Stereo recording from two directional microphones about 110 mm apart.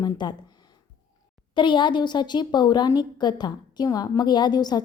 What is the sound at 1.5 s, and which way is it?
A woman's voice, 45° left (ahead or behind).